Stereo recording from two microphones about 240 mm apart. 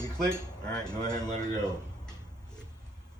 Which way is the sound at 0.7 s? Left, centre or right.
Centre.